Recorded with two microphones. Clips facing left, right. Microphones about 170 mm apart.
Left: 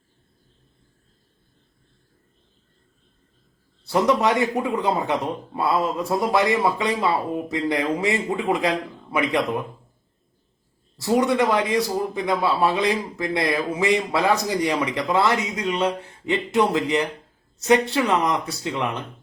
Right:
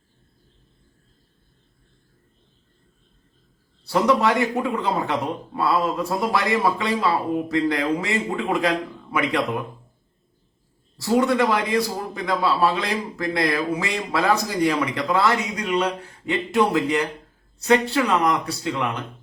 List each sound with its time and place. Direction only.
3.8 s a man's voice: 20° left (ahead or behind)
11.0 s a man's voice: 20° left (ahead or behind)